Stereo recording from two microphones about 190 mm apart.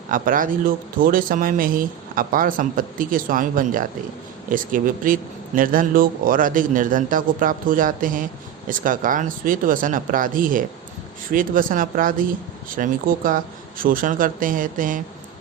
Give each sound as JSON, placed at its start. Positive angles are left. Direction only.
{"t": 0.1, "sound": "a man's voice", "side_deg": -45}